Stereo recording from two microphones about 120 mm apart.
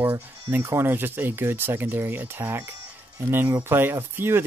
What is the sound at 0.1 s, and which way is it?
Speech, 20° right (ahead or behind).